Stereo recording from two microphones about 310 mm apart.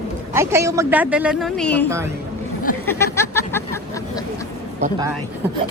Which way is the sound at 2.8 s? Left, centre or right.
Centre.